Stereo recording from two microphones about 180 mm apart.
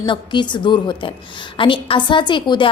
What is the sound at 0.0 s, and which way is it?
A woman's voice, 25° left (ahead or behind).